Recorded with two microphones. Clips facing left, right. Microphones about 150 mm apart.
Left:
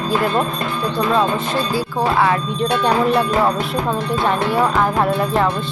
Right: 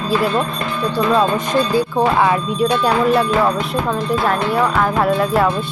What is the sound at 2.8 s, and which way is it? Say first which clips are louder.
Speech: left 1 dB; centre (ahead or behind).